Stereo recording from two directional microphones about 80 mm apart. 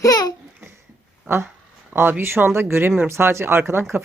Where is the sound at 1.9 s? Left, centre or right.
Right.